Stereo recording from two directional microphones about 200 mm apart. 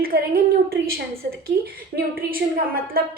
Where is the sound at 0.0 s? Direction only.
45° right (ahead or behind).